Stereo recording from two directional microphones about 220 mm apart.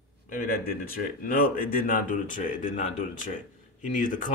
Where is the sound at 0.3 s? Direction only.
40° left (ahead or behind).